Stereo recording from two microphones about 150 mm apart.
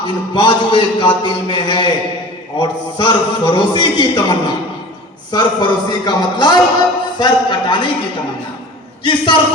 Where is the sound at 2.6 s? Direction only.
30° left (ahead or behind).